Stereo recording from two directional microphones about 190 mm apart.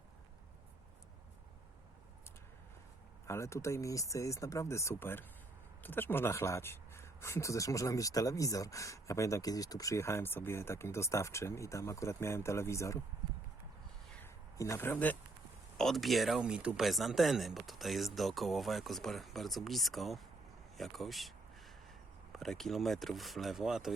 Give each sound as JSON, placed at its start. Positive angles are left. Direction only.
{"t": 3.2, "sound": "speech", "side_deg": 15}
{"t": 14.2, "sound": "a sound", "side_deg": 15}
{"t": 15.8, "sound": "speech", "side_deg": 0}